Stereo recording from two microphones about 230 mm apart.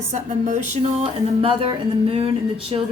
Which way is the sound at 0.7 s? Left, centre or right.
Right.